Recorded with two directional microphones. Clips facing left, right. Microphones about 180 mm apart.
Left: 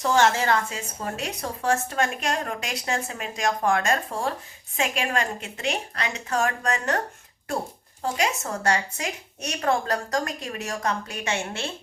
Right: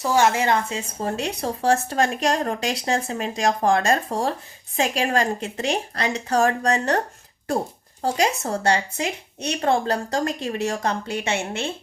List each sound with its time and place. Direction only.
0.0 s a woman's voice: 10° right (ahead or behind); by 7.0 s 35° right (ahead or behind)
8.0 s a woman's voice: 35° right (ahead or behind)